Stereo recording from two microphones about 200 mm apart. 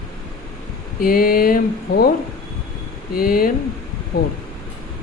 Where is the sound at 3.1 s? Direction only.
45° left (ahead or behind).